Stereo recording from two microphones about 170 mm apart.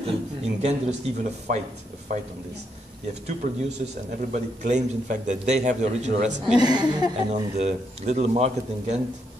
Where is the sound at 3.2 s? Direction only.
40° right (ahead or behind).